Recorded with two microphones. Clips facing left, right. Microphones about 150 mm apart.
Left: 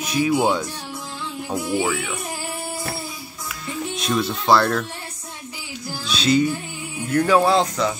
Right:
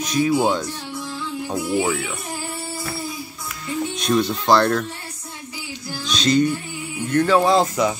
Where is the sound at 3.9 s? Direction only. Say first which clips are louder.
Right 3 dB; centre (ahead or behind).